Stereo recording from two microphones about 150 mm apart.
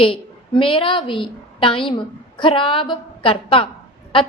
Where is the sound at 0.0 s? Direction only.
35° left (ahead or behind).